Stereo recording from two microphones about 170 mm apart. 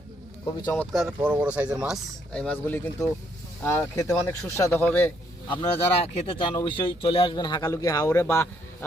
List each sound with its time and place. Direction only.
0.4 s speech: 20° left (ahead or behind)
0.8 s speech: 5° right (ahead or behind)
5.5 s speech: 30° left (ahead or behind); by 8.4 s 15° left (ahead or behind)